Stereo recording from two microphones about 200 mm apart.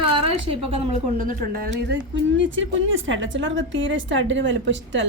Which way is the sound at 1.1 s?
45° right (ahead or behind).